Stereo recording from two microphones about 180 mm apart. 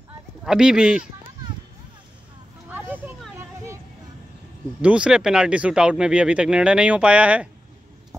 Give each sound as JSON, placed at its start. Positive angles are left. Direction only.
{"t": 0.4, "sound": "speech", "side_deg": -5}
{"t": 2.7, "sound": "a sound", "side_deg": -10}
{"t": 4.8, "sound": "speech", "side_deg": -5}